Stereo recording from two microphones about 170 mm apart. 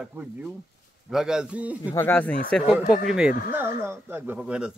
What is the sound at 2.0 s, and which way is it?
Speech, 10° left (ahead or behind).